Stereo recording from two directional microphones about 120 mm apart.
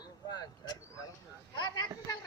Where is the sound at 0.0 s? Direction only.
35° left (ahead or behind).